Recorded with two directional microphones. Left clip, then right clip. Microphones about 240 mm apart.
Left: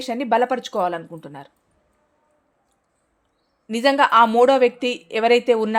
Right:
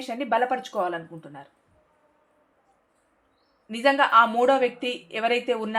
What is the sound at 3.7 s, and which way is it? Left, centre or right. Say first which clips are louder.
Speech: left 4 dB; left.